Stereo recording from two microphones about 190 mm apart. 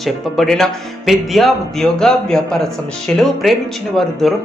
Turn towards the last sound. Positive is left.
turn(degrees=0)  # may be behind; listen again after turning